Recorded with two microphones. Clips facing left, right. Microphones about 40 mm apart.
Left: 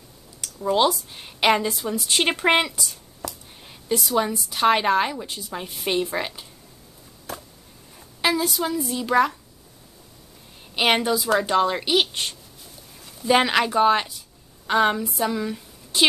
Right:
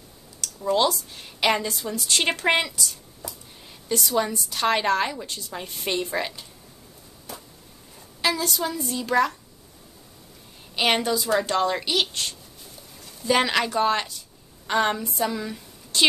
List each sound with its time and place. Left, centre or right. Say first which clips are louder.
0.4 s a woman's voice: left 2 dB; centre
3.2 s a sound: left 5 dB; left
4.0 s a woman's voice: even; centre
8.2 s a woman's voice: left 2 dB; centre
10.8 s a woman's voice: left 2 dB; centre
13.0 s a woman's voice: left 3 dB; centre